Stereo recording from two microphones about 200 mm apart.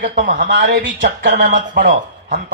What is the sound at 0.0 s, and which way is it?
Speech, 40° right (ahead or behind).